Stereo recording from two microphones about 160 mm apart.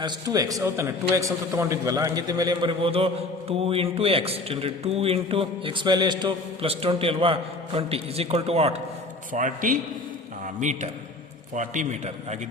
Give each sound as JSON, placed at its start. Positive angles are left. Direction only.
{"t": 0.0, "sound": "a man's voice", "side_deg": -25}
{"t": 9.3, "sound": "a man's voice", "side_deg": -55}